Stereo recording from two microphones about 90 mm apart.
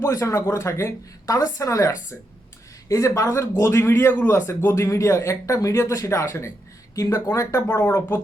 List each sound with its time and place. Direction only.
0.0 s speech: 35° left (ahead or behind)